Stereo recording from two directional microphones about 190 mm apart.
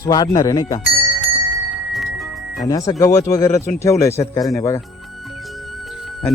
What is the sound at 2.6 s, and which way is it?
Speech, 20° left (ahead or behind).